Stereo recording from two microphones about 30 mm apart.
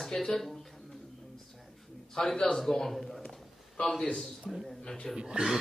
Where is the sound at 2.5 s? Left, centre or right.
Centre.